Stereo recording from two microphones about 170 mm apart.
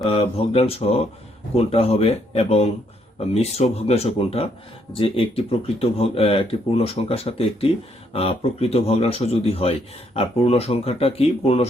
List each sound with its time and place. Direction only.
0.1 s speech: 35° left (ahead or behind)